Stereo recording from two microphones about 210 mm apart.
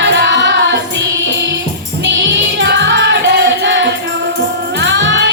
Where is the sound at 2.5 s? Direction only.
55° right (ahead or behind).